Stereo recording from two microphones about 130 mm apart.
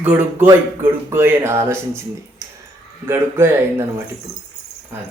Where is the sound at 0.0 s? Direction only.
15° right (ahead or behind).